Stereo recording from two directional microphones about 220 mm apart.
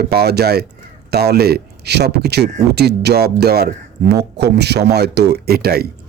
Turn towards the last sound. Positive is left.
turn(degrees=-45)  # may be behind; listen again after turning